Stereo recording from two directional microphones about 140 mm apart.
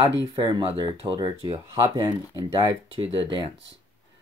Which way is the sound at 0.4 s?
35° right (ahead or behind).